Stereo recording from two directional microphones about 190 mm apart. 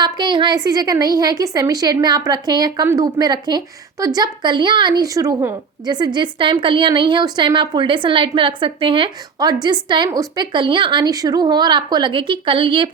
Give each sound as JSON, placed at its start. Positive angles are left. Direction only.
{"t": 0.0, "sound": "a woman's voice", "side_deg": -25}